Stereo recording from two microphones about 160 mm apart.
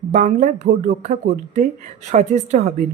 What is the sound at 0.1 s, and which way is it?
Speech, 45° right (ahead or behind).